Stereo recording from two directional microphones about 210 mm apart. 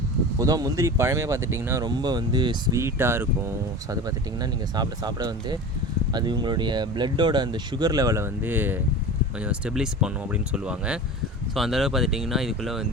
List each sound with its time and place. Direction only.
0.3 s speech: 15° right (ahead or behind); by 12.9 s centre (ahead or behind)